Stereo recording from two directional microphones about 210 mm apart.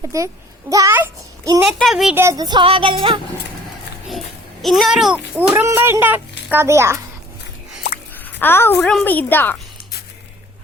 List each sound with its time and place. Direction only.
0.1 s a child's voice: 15° right (ahead or behind)
1.6 s a child's voice: centre (ahead or behind); by 3.2 s 25° right (ahead or behind)
4.6 s a child's voice: centre (ahead or behind)
8.1 s a woman's voice: 10° left (ahead or behind)